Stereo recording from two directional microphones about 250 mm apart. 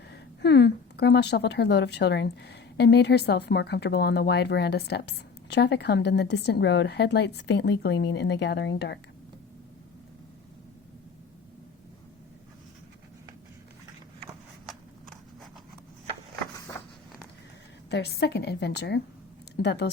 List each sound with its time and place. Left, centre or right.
0.1 s speech: left
17.9 s speech: left